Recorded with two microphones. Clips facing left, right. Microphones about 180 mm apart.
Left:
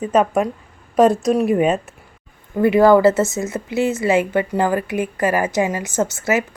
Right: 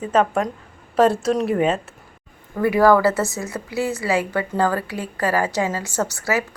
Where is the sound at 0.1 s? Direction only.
15° left (ahead or behind).